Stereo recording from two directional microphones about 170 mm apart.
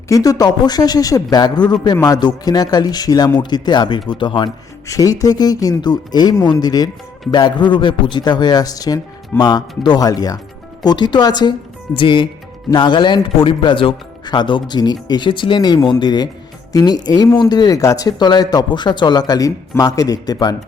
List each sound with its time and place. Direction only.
0.1 s speech: 20° left (ahead or behind)